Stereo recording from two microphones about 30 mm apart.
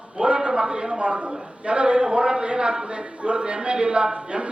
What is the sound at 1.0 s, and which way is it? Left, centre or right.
A man's voice, right.